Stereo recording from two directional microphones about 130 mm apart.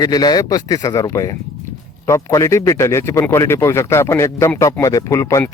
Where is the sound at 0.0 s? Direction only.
30° left (ahead or behind).